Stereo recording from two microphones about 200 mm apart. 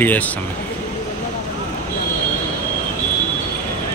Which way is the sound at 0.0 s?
10° left (ahead or behind).